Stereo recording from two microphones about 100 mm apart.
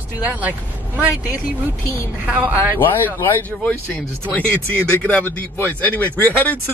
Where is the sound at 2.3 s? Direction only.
15° right (ahead or behind).